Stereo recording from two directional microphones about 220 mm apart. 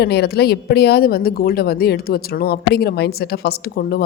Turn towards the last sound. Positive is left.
turn(degrees=45)  # may be behind; listen again after turning